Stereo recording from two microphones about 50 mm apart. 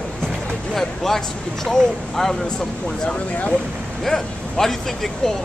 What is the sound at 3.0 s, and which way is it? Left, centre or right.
Speech, left.